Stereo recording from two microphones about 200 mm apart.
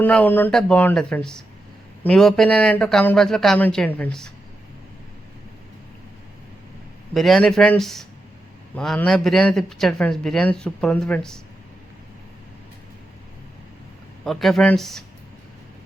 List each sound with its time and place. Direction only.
0.0 s speech: 10° left (ahead or behind)
7.1 s speech: centre (ahead or behind)
14.3 s speech: centre (ahead or behind)